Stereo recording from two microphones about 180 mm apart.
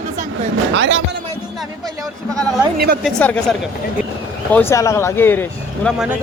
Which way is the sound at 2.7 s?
55° right (ahead or behind).